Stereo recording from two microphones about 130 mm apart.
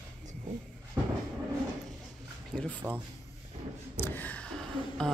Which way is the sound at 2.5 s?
10° left (ahead or behind).